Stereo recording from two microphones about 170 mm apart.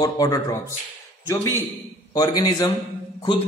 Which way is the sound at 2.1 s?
25° left (ahead or behind).